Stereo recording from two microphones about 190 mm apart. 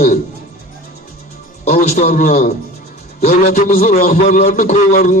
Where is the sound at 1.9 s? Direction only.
45° left (ahead or behind).